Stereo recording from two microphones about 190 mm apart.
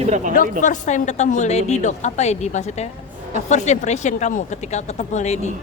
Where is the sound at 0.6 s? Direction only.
40° left (ahead or behind).